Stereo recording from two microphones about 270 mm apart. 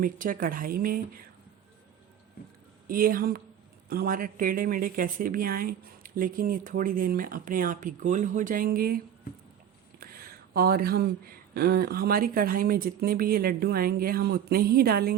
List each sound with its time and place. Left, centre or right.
0.0 s a woman's voice: right
2.8 s a woman's voice: right
10.0 s a sound: right
11.5 s a woman's voice: right